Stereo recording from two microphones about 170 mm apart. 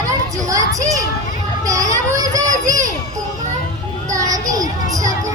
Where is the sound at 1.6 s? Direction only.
20° right (ahead or behind).